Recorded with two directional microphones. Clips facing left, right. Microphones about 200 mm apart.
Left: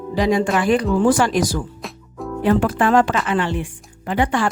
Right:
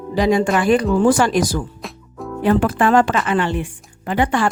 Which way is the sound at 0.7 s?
50° right (ahead or behind).